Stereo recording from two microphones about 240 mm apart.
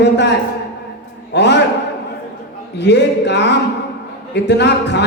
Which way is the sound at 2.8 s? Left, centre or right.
Left.